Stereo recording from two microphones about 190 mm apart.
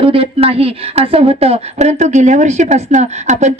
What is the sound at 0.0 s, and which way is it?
A woman's voice, 30° right (ahead or behind).